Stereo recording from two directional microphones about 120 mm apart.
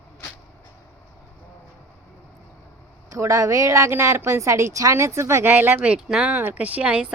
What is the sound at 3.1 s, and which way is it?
A woman's voice, 25° right (ahead or behind).